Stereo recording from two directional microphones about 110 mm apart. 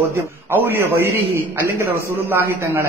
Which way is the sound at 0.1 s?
20° right (ahead or behind).